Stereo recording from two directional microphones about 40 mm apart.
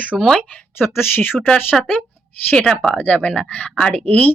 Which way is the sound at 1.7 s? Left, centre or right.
Centre.